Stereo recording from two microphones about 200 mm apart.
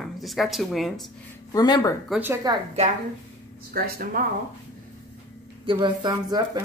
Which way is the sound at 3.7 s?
50° right (ahead or behind).